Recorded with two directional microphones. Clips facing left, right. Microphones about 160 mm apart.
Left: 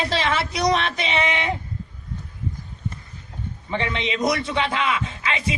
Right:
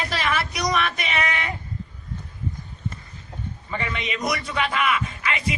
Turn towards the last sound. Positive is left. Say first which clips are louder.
# left 1 dB
turn(degrees=25)  # may be behind; listen again after turning